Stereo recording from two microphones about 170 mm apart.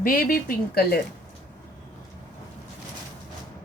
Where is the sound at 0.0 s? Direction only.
60° left (ahead or behind).